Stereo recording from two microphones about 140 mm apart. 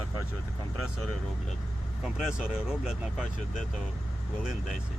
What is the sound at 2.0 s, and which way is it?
Speech, 5° right (ahead or behind).